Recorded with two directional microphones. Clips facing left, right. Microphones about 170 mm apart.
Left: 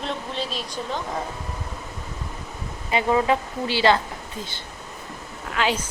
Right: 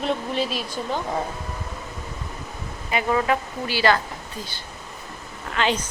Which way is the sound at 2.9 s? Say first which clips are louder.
Left 2 dB; 20° left (ahead or behind).